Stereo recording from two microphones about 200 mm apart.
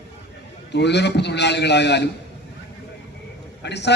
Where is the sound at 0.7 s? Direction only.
60° left (ahead or behind).